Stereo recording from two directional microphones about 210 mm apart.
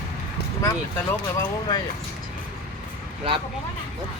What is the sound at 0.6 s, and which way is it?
Speech, 15° left (ahead or behind).